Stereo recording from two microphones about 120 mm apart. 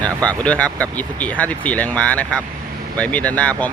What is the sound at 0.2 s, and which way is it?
Speech, 10° left (ahead or behind).